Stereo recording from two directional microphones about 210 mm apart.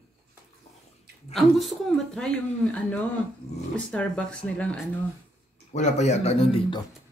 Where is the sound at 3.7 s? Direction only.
5° left (ahead or behind).